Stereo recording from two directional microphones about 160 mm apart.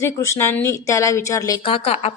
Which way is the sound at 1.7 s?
40° left (ahead or behind).